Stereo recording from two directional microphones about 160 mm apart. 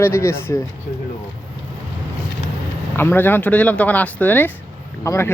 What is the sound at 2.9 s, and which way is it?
Speech, 15° left (ahead or behind).